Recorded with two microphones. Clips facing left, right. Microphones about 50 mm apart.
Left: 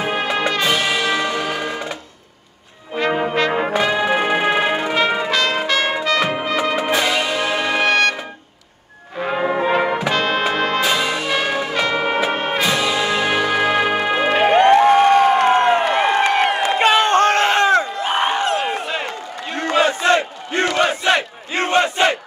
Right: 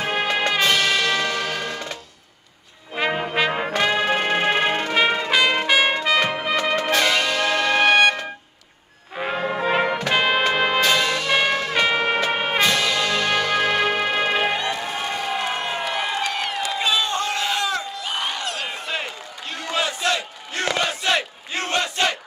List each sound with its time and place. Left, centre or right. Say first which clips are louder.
0.0 s music: left 2 dB; centre
3.6 s brass instrument: left 3 dB; centre
5.3 s trumpet: even; centre
6.5 s music: left 1 dB; centre
7.9 s music: right 1 dB; centre
9.3 s brass instrument: left 4 dB; centre
10.1 s music: left 1 dB; centre
10.8 s music: left 1 dB; centre
11.7 s music: even; centre
12.0 s music: left 2 dB; centre
14.3 s music: left 10 dB; left
19.5 s crowd: left 8 dB; left